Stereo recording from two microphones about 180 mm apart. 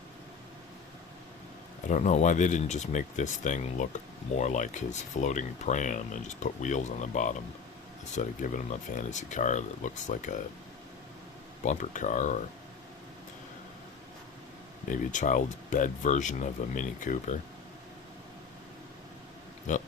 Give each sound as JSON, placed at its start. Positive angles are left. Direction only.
{"t": 1.9, "sound": "speech", "side_deg": 40}
{"t": 11.6, "sound": "speech", "side_deg": 45}
{"t": 14.8, "sound": "speech", "side_deg": 45}
{"t": 19.7, "sound": "speech", "side_deg": 45}